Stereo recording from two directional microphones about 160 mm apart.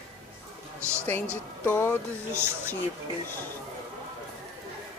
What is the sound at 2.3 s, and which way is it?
Speech, 15° right (ahead or behind).